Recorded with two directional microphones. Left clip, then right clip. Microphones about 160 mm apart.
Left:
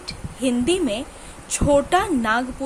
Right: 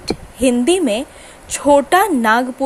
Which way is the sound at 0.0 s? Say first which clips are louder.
Right 9 dB; 40° right (ahead or behind).